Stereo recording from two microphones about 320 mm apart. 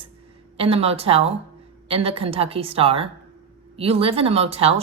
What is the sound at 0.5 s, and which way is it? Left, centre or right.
A woman's voice, centre.